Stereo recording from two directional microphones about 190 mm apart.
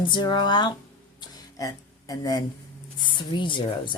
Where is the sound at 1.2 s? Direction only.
20° left (ahead or behind).